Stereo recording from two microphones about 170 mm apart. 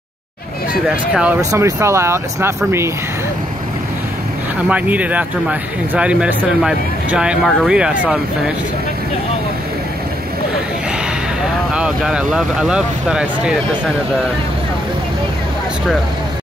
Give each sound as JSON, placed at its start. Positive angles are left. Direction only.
{"t": 0.8, "sound": "speech", "side_deg": -5}
{"t": 1.4, "sound": "speech", "side_deg": -20}
{"t": 4.6, "sound": "speech", "side_deg": -10}
{"t": 11.7, "sound": "speech", "side_deg": -5}